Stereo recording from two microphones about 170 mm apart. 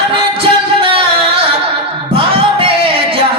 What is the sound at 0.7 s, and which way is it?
Music, 30° right (ahead or behind).